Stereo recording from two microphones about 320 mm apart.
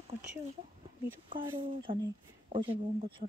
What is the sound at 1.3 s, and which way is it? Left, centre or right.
Speech, right.